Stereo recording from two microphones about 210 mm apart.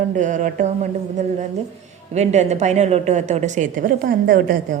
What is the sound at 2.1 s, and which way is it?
A woman's voice, 30° right (ahead or behind).